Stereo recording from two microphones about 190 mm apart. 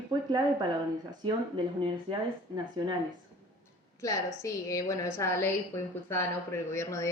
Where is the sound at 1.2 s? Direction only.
25° right (ahead or behind).